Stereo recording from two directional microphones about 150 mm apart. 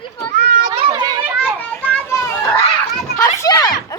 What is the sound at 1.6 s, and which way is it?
Children playing, 10° left (ahead or behind).